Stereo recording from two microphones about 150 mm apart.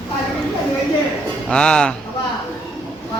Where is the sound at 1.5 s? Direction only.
5° left (ahead or behind).